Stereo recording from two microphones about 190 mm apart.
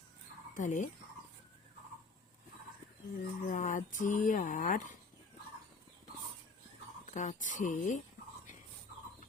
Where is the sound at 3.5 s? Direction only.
40° left (ahead or behind).